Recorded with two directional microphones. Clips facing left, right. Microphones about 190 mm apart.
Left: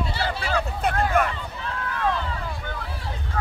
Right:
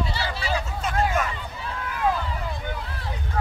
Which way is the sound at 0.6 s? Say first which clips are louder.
Left 5 dB; 60° left (ahead or behind).